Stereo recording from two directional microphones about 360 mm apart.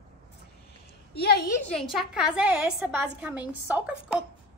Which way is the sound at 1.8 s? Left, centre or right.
Centre.